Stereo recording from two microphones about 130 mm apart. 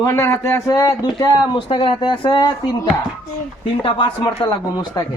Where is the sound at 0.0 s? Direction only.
25° left (ahead or behind).